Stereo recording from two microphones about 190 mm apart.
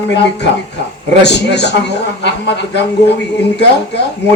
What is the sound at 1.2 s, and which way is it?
A man's voice, 65° left (ahead or behind).